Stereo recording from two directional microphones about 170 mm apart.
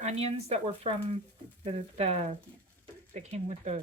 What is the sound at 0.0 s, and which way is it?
Speech, 40° right (ahead or behind).